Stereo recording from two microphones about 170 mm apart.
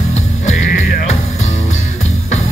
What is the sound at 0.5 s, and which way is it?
Music, 55° left (ahead or behind).